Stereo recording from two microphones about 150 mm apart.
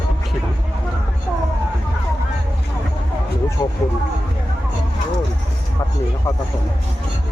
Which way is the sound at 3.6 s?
25° left (ahead or behind).